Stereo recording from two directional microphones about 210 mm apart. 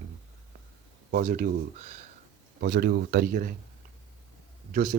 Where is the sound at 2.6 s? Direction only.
50° right (ahead or behind).